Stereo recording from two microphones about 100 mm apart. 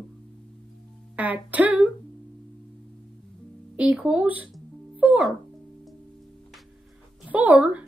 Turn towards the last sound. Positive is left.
turn(degrees=-15)  # may be behind; listen again after turning